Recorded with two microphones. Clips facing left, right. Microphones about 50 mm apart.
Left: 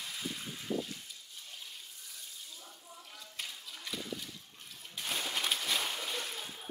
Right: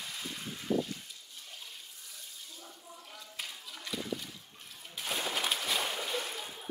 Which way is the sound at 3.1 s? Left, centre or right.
Centre.